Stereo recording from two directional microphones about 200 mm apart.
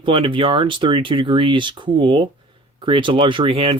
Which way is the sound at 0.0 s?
25° right (ahead or behind).